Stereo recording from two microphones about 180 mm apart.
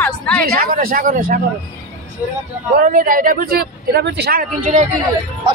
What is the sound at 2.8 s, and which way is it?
Speech, 50° right (ahead or behind).